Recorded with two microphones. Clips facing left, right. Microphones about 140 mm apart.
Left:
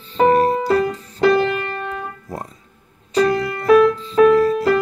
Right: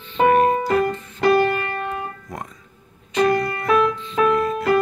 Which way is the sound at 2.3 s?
30° left (ahead or behind).